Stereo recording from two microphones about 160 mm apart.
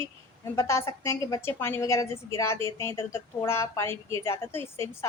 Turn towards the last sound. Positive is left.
turn(degrees=15)  # may be behind; listen again after turning